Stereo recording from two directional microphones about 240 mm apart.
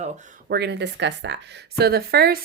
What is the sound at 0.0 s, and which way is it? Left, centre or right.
Speech, right.